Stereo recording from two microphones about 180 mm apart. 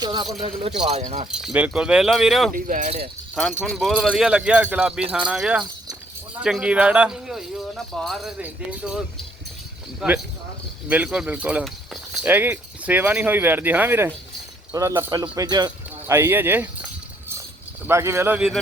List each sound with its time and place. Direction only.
0.0 s a sound: 25° right (ahead or behind)
0.9 s speech: 35° right (ahead or behind)
1.3 s speech: 5° right (ahead or behind)
2.6 s speech: 45° right (ahead or behind)
3.6 s speech: centre (ahead or behind)
10.0 s speech: centre (ahead or behind)
17.8 s speech: 15° right (ahead or behind)